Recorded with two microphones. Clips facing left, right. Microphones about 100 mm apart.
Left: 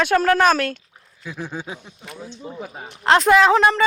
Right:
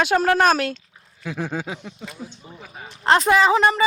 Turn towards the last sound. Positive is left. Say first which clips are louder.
# left 2 dB
turn(degrees=-5)  # may be behind; listen again after turning